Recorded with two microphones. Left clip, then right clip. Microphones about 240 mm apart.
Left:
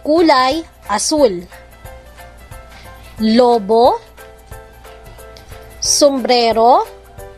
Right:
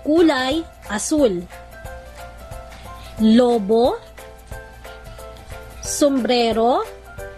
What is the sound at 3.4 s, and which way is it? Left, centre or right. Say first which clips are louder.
Speech: left 8 dB; left.